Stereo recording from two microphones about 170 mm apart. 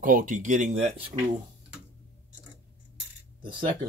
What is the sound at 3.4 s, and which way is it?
Speech, 30° right (ahead or behind).